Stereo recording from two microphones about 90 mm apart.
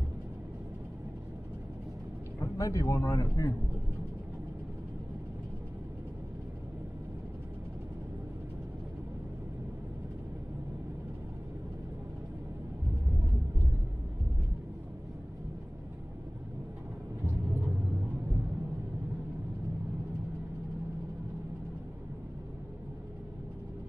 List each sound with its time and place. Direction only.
2.4 s speech: 35° left (ahead or behind)